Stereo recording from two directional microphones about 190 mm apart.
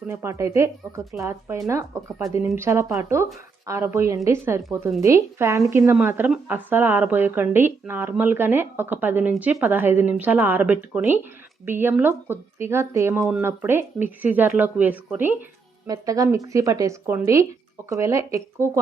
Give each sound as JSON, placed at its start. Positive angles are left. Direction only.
{"t": 0.1, "sound": "speech", "side_deg": -15}